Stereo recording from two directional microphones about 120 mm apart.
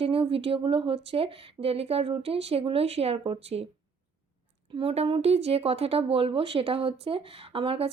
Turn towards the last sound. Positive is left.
turn(degrees=-50)  # may be behind; listen again after turning